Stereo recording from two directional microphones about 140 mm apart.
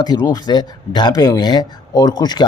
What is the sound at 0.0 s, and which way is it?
Speech, 30° left (ahead or behind).